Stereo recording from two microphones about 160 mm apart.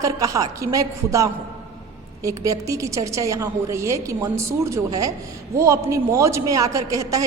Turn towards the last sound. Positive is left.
turn(degrees=-20)  # may be behind; listen again after turning